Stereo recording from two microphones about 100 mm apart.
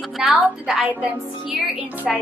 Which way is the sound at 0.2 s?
5° right (ahead or behind).